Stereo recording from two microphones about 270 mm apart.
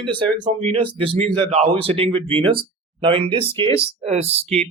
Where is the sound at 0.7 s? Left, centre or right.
Centre.